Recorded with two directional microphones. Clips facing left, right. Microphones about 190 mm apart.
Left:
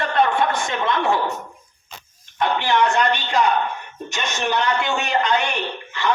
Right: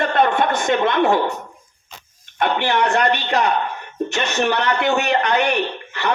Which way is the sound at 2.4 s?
60° right (ahead or behind).